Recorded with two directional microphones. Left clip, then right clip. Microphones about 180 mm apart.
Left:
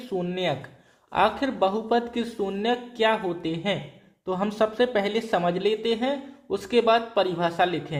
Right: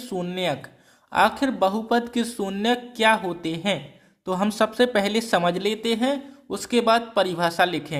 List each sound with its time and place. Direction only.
0.1 s speech: 25° right (ahead or behind)